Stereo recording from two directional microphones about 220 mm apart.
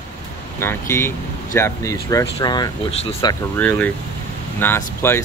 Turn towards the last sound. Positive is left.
turn(degrees=10)  # may be behind; listen again after turning